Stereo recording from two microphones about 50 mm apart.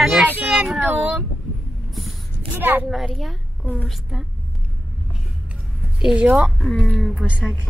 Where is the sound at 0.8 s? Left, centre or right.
Right.